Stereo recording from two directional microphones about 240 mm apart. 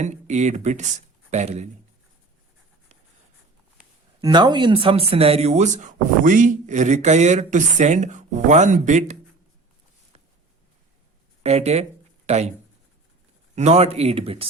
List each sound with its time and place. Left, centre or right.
0.0 s speech: right
4.2 s speech: centre
11.4 s speech: right
13.6 s speech: right